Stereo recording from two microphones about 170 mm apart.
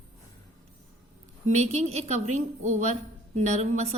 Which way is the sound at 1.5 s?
40° right (ahead or behind).